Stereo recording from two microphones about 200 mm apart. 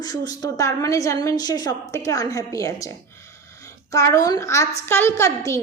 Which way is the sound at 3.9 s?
15° left (ahead or behind).